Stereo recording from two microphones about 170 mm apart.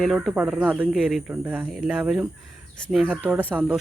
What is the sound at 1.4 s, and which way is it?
Speech, 10° right (ahead or behind).